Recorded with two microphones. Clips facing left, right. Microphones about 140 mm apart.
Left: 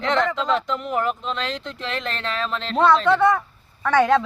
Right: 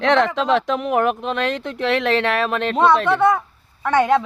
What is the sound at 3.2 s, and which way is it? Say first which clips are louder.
Speech: right 2 dB; 20° right (ahead or behind).